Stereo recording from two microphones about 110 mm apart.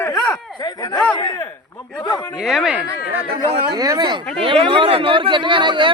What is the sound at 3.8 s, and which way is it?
Speech, 40° right (ahead or behind).